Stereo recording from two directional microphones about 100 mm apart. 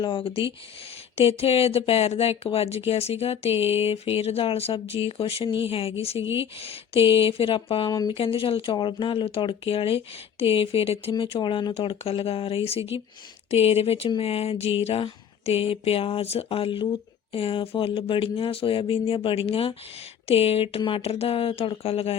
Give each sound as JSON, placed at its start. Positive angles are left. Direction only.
{"t": 0.0, "sound": "speech", "side_deg": 60}
{"t": 1.1, "sound": "speech", "side_deg": 80}
{"t": 7.9, "sound": "speech", "side_deg": 40}
{"t": 8.1, "sound": "speech", "side_deg": 70}
{"t": 8.7, "sound": "speech", "side_deg": 50}
{"t": 11.2, "sound": "speech", "side_deg": 60}
{"t": 13.5, "sound": "speech", "side_deg": 90}
{"t": 14.2, "sound": "speech", "side_deg": 75}